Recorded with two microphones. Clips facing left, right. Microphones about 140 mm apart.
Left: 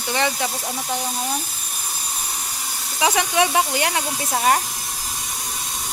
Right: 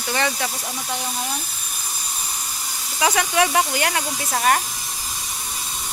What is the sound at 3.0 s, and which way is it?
Speech, 15° left (ahead or behind).